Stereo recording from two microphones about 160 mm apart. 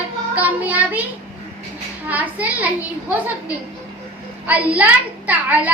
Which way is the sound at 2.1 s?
10° right (ahead or behind).